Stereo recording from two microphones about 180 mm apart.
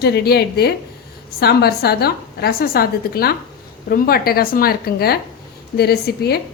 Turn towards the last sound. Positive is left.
turn(degrees=60)  # may be behind; listen again after turning